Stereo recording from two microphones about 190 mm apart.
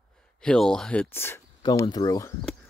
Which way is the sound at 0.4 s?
5° left (ahead or behind).